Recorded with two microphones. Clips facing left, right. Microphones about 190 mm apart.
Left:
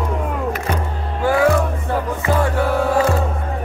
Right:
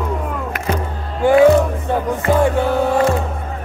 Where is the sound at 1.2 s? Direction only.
20° right (ahead or behind).